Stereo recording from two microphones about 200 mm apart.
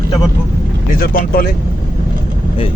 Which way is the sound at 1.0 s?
45° left (ahead or behind).